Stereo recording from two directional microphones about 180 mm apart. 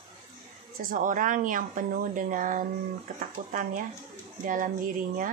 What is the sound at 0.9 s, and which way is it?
A woman's voice, 45° right (ahead or behind).